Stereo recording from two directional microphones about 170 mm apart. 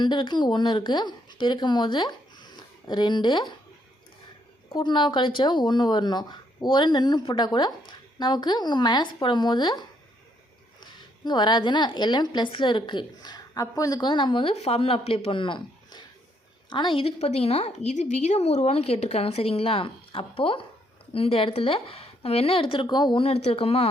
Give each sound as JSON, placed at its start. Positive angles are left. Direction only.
{"t": 0.0, "sound": "speech", "side_deg": 25}
{"t": 4.7, "sound": "a woman's voice", "side_deg": 25}